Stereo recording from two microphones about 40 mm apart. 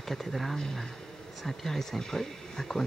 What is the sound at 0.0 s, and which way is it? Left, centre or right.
Speech, centre.